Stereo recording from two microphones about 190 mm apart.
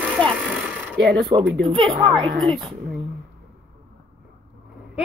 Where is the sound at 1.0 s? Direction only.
55° right (ahead or behind).